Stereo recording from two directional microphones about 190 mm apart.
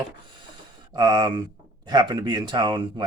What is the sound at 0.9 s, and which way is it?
Speech, 20° right (ahead or behind).